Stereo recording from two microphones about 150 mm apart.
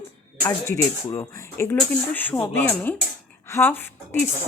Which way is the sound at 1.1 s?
20° left (ahead or behind).